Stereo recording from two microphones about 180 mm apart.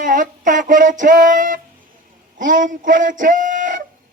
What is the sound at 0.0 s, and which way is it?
Speech, 45° right (ahead or behind).